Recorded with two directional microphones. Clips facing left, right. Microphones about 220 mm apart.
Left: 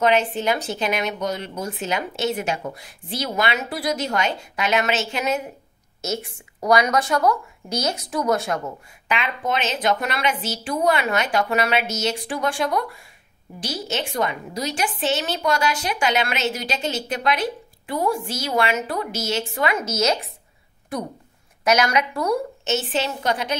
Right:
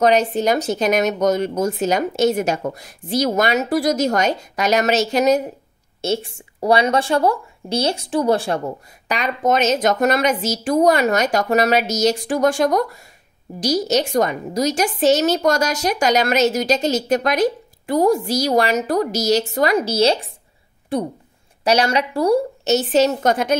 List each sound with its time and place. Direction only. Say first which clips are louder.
0.0 s speech: right 4 dB; 40° right (ahead or behind)